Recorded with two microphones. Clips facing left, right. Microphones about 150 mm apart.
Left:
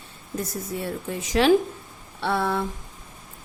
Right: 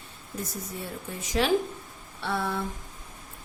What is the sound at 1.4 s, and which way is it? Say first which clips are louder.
A woman's voice: left 6 dB; 90° left.